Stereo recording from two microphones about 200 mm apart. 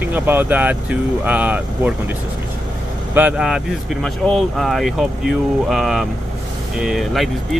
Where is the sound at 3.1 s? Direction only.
5° right (ahead or behind).